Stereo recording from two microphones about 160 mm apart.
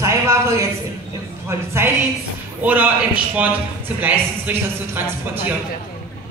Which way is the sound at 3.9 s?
10° right (ahead or behind).